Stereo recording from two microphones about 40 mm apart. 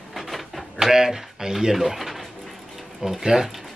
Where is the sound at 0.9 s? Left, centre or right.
Centre.